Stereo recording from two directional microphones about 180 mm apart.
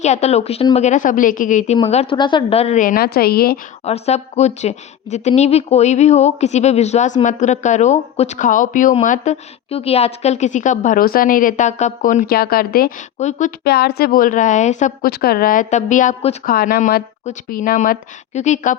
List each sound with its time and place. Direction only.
0.0 s speech: 40° left (ahead or behind); by 3.6 s 55° left (ahead or behind)
3.8 s speech: 35° left (ahead or behind)
12.3 s speech: 60° left (ahead or behind)
13.1 s speech: 40° left (ahead or behind)
13.7 s a woman's voice: 65° left (ahead or behind); by 15.1 s 45° left (ahead or behind)
15.1 s a woman's voice: 60° left (ahead or behind); by 16.4 s 40° left (ahead or behind)
16.5 s a woman's voice: 55° left (ahead or behind)